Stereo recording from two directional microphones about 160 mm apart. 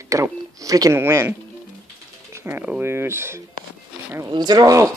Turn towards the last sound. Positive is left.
turn(degrees=-20)  # may be behind; listen again after turning